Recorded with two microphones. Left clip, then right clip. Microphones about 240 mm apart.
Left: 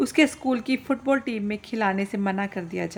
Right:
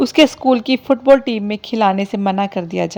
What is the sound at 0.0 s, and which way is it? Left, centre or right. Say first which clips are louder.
A woman's voice: right 9 dB; right.